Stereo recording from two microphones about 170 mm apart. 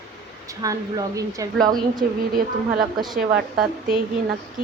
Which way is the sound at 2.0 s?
55° right (ahead or behind).